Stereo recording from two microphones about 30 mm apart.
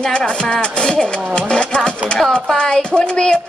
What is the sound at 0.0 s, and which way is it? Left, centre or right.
A woman's voice, left.